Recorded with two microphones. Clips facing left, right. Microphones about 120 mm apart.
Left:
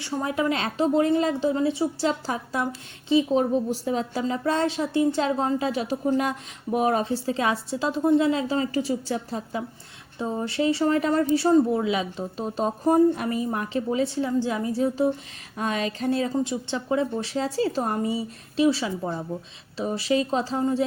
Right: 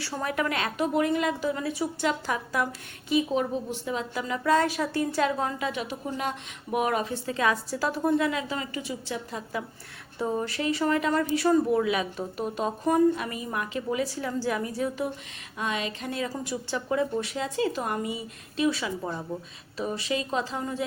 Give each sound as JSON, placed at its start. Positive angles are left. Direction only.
{"t": 0.0, "sound": "a woman's voice", "side_deg": 20}
{"t": 12.6, "sound": "a woman's voice", "side_deg": 40}